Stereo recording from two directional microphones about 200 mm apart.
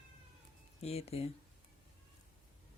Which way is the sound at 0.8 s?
30° left (ahead or behind).